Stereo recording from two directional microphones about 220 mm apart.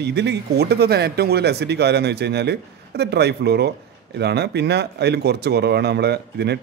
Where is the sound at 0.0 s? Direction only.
50° right (ahead or behind).